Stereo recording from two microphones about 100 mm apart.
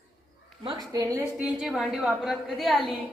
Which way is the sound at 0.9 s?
35° right (ahead or behind).